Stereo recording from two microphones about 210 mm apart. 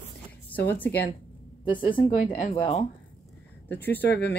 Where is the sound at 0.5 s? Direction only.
10° left (ahead or behind).